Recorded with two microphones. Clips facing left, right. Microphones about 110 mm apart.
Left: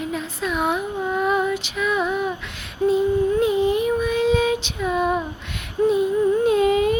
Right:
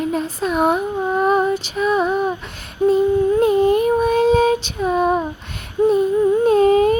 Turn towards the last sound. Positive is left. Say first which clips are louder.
# right 4 dB
turn(degrees=-40)  # may be behind; listen again after turning